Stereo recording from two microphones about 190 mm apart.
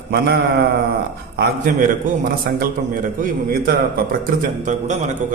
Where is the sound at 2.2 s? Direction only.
50° right (ahead or behind).